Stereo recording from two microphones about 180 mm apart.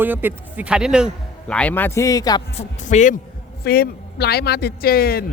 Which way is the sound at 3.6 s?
60° left (ahead or behind).